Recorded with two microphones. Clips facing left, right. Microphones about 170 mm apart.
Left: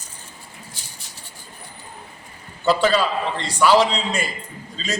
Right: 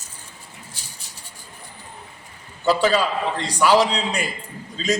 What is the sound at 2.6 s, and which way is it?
A man's voice, 10° right (ahead or behind).